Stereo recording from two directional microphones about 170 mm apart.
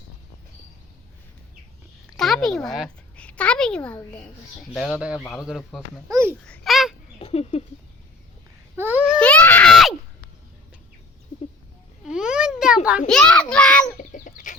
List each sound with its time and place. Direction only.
2.1 s a child's voice: centre (ahead or behind)
6.1 s speech: 15° right (ahead or behind)
6.4 s babbling: centre (ahead or behind)
7.2 s rodents: 35° left (ahead or behind)
8.7 s babbling: 10° right (ahead or behind)
9.2 s screaming: 10° left (ahead or behind)
12.0 s a sound: 5° right (ahead or behind)
13.1 s a child's voice: 5° left (ahead or behind)
14.0 s chicken: 50° left (ahead or behind)